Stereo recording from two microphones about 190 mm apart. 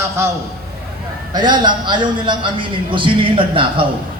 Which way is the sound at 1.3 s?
20° right (ahead or behind).